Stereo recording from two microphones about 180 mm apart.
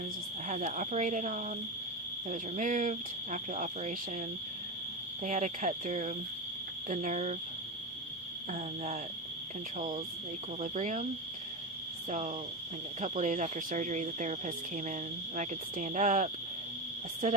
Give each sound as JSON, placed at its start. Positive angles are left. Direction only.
{"t": 0.4, "sound": "speech", "side_deg": -45}
{"t": 5.2, "sound": "speech", "side_deg": -45}
{"t": 8.5, "sound": "speech", "side_deg": -40}
{"t": 13.0, "sound": "speech", "side_deg": -45}